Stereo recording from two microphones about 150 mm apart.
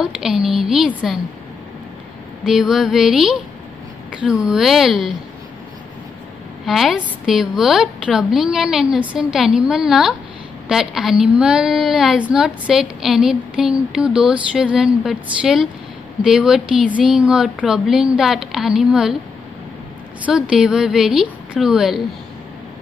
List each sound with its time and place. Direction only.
0.0 s a woman's voice: 5° right (ahead or behind)
2.4 s a woman's voice: 5° right (ahead or behind)
6.6 s a woman's voice: centre (ahead or behind)
20.2 s a woman's voice: 5° right (ahead or behind)